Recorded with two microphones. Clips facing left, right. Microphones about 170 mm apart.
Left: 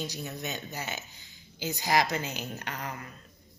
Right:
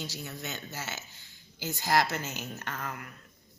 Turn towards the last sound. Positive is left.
turn(degrees=15)  # may be behind; listen again after turning